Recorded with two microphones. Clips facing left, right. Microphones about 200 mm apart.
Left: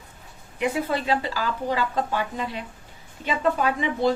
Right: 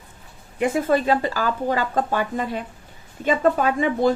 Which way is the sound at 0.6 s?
45° right (ahead or behind).